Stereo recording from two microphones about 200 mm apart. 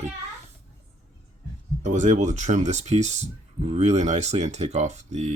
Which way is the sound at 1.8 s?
40° right (ahead or behind).